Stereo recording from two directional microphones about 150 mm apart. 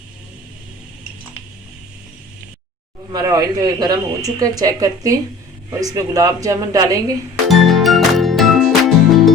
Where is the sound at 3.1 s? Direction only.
25° right (ahead or behind).